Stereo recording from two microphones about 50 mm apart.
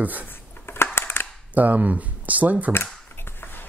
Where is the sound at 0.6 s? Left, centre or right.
Left.